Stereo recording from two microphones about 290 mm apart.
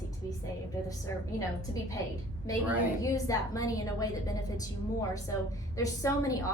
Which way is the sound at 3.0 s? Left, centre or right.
Centre.